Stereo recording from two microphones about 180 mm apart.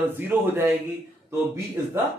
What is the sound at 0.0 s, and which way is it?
A man's voice, 10° right (ahead or behind).